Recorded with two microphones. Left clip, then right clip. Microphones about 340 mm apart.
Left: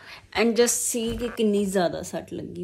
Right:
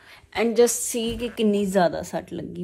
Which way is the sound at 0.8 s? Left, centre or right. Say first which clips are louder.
Right 1 dB; right.